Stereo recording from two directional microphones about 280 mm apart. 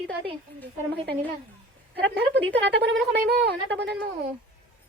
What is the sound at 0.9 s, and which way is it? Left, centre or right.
Speech, right.